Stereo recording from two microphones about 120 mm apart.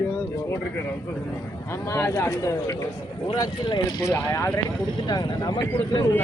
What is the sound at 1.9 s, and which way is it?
Speech, 25° left (ahead or behind).